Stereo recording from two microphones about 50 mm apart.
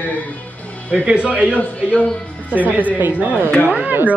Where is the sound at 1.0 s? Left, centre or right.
Right.